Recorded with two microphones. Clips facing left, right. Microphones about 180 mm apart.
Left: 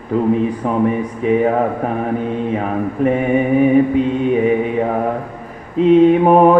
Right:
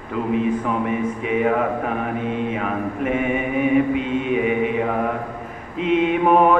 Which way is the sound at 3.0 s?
35° left (ahead or behind).